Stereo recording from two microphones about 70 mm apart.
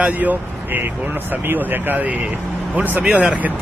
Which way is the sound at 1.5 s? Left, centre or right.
Right.